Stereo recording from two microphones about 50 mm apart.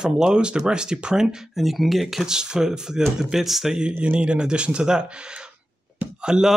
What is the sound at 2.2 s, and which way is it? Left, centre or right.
Speech, centre.